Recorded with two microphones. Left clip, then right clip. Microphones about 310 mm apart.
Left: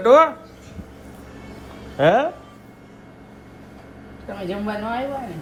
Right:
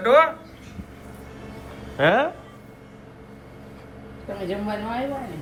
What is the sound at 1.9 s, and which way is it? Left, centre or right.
Speech, centre.